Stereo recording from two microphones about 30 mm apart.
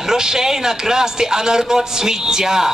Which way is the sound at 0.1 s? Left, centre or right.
Centre.